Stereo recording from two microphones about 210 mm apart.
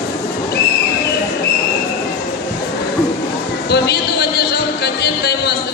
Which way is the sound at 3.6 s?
50° left (ahead or behind).